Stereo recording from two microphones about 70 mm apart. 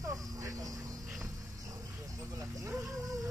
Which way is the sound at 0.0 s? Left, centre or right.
Right.